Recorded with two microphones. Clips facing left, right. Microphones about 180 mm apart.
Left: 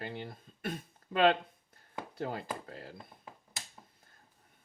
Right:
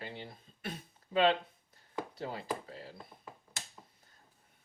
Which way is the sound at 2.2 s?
50° left (ahead or behind).